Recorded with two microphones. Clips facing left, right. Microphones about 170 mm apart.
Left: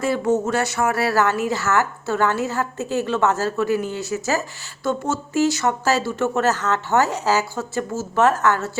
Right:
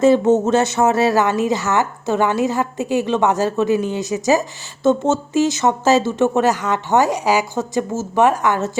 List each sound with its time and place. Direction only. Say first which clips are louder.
0.0 s speech: right 7 dB; 25° right (ahead or behind)